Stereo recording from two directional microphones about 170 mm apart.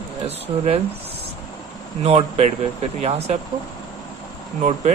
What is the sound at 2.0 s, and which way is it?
Speech, 35° right (ahead or behind).